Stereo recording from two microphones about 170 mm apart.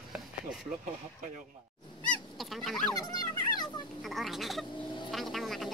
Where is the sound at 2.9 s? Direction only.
25° left (ahead or behind).